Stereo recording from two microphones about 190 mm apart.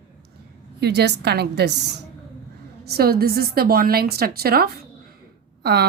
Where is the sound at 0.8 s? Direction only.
60° right (ahead or behind).